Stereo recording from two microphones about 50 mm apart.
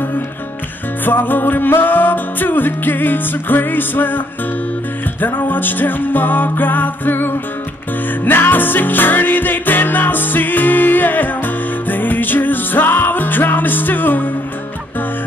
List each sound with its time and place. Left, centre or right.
1.0 s music: left
5.2 s music: left